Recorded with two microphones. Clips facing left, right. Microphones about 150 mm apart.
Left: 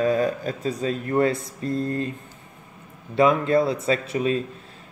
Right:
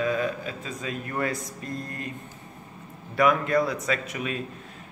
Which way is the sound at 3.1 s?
25° left (ahead or behind).